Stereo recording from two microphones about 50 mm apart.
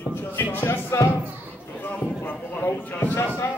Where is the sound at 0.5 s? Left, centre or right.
Left.